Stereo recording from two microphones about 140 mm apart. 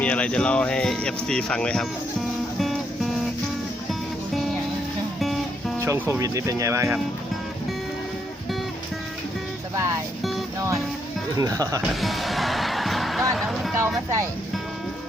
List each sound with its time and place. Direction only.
0.0 s speech: 10° left (ahead or behind)
2.6 s music: centre (ahead or behind)
5.2 s music: centre (ahead or behind)
5.8 s speech: 20° right (ahead or behind)
11.3 s speech: 25° right (ahead or behind)
11.8 s music: centre (ahead or behind)
13.7 s speech: 20° right (ahead or behind)